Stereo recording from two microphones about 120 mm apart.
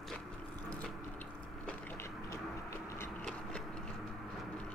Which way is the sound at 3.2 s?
10° left (ahead or behind).